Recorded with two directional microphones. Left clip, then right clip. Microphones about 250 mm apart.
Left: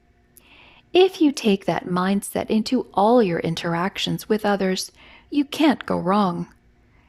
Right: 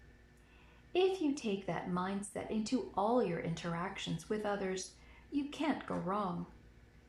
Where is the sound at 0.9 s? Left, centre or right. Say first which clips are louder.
Left 16 dB; left.